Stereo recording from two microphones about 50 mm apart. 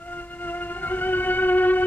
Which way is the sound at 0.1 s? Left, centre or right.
Left.